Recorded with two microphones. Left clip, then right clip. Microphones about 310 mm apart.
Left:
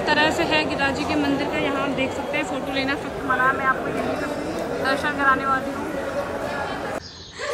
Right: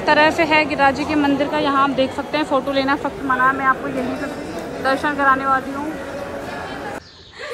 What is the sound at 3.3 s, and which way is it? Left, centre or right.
Speech, centre.